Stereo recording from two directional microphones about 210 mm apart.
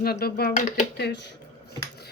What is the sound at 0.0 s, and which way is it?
Speech, 45° left (ahead or behind).